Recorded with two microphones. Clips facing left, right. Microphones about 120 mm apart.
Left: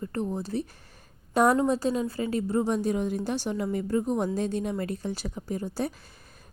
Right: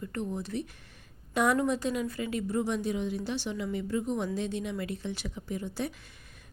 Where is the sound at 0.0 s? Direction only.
35° left (ahead or behind).